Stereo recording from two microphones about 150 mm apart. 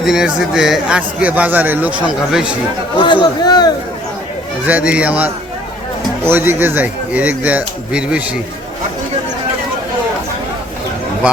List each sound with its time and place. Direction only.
0.0 s a man's voice: 5° right (ahead or behind)
3.0 s speech: 30° left (ahead or behind)
4.6 s a man's voice: 10° right (ahead or behind)